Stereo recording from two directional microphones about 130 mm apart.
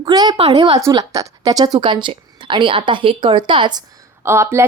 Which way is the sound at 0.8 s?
25° right (ahead or behind).